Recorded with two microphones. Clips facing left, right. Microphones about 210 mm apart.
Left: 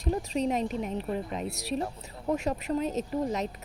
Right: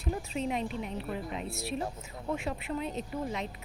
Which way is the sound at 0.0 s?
40° left (ahead or behind).